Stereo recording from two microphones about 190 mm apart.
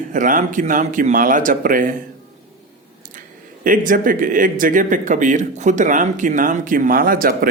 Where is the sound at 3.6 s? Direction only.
45° right (ahead or behind).